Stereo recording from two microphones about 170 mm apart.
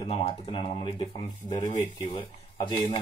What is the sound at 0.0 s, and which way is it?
Speech, 35° left (ahead or behind).